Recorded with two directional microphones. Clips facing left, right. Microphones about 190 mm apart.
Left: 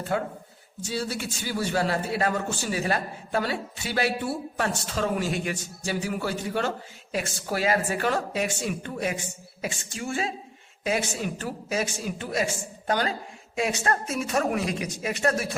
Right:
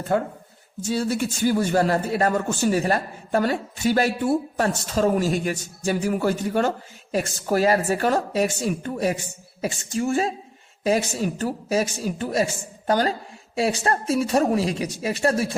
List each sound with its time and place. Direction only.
0.9 s a man's voice: 50° right (ahead or behind); by 15.4 s 30° right (ahead or behind)